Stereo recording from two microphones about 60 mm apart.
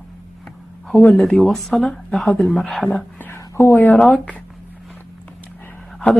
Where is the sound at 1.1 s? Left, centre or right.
Centre.